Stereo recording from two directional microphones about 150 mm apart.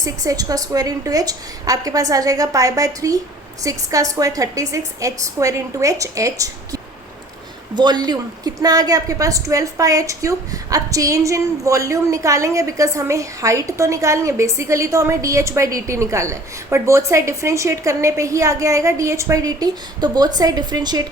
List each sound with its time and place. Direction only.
0.0 s a woman's voice: 25° right (ahead or behind)
7.8 s a woman's voice: 30° right (ahead or behind)